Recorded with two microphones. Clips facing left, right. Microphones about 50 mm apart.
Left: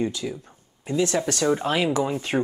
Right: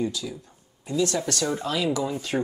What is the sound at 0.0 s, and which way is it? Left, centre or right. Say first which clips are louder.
Speech: left 2 dB; left.